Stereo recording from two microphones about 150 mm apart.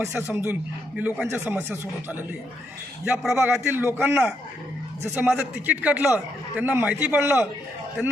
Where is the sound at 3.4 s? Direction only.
15° right (ahead or behind).